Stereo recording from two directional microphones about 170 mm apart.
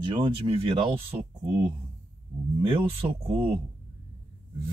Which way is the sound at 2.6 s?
35° right (ahead or behind).